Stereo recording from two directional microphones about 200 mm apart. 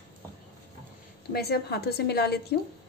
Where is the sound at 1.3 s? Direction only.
55° left (ahead or behind).